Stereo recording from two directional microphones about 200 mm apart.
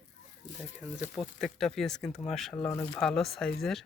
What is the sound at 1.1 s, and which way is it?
Speech, centre (ahead or behind).